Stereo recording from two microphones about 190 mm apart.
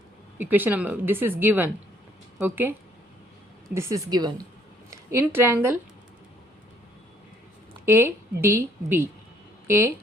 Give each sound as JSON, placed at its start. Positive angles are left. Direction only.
{"t": 0.3, "sound": "a woman's voice", "side_deg": -10}
{"t": 3.8, "sound": "a woman's voice", "side_deg": -15}
{"t": 7.9, "sound": "a woman's voice", "side_deg": -15}